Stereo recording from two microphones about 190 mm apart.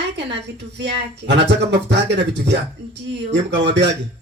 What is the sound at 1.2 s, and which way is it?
Speech, 65° right (ahead or behind).